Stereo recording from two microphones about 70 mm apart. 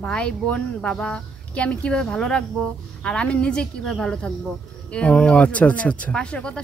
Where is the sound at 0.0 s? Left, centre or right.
Centre.